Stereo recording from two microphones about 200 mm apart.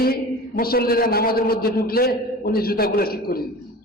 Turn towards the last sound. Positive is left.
turn(degrees=50)  # may be behind; listen again after turning